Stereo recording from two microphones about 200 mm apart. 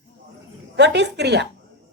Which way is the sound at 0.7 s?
60° right (ahead or behind).